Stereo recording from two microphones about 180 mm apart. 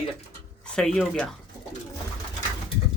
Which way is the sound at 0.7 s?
5° left (ahead or behind).